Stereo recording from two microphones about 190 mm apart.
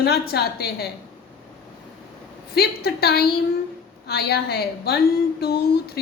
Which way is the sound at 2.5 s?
55° left (ahead or behind).